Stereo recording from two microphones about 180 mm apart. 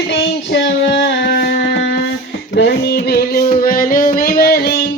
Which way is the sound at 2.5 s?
65° left (ahead or behind).